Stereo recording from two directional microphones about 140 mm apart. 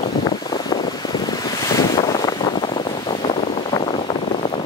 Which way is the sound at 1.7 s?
25° left (ahead or behind).